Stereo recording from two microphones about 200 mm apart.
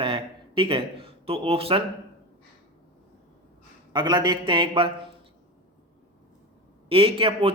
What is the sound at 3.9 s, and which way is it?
Speech, 20° right (ahead or behind).